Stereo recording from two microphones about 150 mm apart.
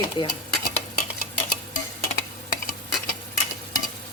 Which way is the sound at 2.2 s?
70° left (ahead or behind).